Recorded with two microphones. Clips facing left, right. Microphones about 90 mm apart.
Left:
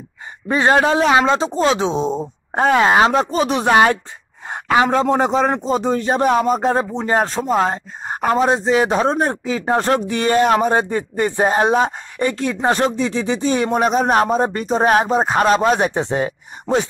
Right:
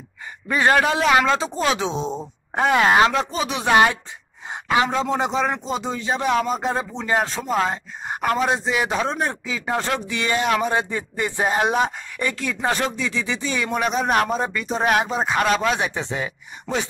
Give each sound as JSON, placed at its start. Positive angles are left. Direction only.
{"t": 0.5, "sound": "a man's voice", "side_deg": 30}
{"t": 3.2, "sound": "a man's voice", "side_deg": 40}
{"t": 4.5, "sound": "a man's voice", "side_deg": 50}